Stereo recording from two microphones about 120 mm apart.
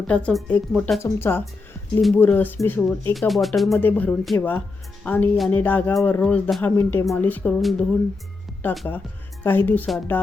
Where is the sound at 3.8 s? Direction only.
15° left (ahead or behind).